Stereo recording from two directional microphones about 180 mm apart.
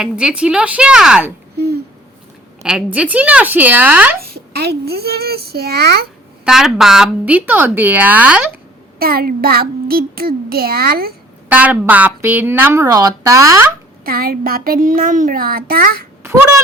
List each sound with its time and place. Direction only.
0.0 s a woman's voice: 5° right (ahead or behind)
1.5 s a child's voice: 65° right (ahead or behind)
2.6 s speech: 5° right (ahead or behind)
4.2 s a child's voice: 65° right (ahead or behind)
6.4 s speech: 5° right (ahead or behind)
9.0 s a child's voice: 55° right (ahead or behind)
11.4 s speech: 10° right (ahead or behind)
14.0 s a child's voice: 55° right (ahead or behind)
16.2 s a sound: 15° right (ahead or behind)